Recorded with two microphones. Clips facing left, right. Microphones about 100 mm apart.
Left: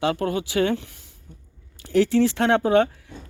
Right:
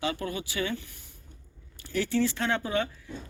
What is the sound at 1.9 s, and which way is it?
Speech, 80° left.